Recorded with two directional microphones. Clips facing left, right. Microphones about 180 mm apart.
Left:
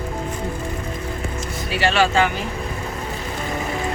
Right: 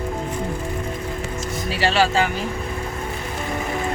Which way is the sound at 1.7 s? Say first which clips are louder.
Left 1 dB; 35° right (ahead or behind).